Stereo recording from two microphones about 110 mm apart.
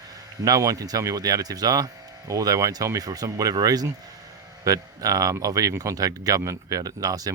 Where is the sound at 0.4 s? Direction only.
35° right (ahead or behind).